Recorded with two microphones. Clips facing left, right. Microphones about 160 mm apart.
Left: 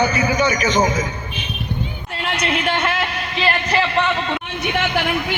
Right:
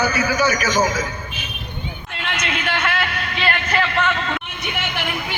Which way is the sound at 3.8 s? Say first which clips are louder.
Left 2 dB; 20° left (ahead or behind).